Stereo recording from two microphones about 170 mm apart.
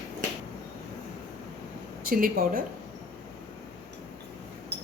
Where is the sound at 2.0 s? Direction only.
60° right (ahead or behind).